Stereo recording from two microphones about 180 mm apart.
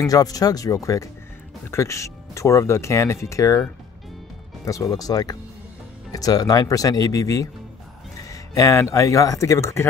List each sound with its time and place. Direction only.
0.0 s speech: 20° left (ahead or behind)